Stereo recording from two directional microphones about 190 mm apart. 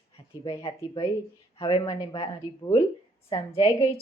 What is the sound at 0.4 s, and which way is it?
A woman's voice, 25° left (ahead or behind).